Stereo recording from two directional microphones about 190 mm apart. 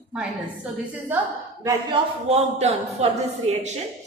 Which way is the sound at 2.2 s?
35° right (ahead or behind).